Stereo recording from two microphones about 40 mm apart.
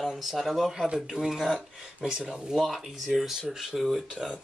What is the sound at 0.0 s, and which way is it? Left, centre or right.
Speech, centre.